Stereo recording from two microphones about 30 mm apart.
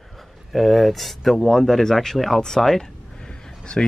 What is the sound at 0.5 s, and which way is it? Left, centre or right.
Speech, centre.